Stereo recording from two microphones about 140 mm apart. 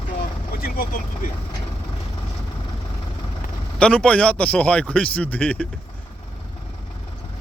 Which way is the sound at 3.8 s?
10° left (ahead or behind).